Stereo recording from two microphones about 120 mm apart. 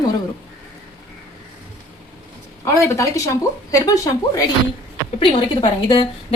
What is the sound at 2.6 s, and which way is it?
A woman's voice, 25° left (ahead or behind).